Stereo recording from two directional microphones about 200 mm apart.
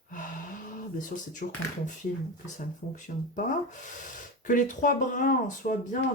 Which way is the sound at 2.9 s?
40° left (ahead or behind).